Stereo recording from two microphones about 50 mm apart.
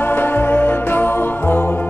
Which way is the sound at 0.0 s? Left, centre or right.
Left.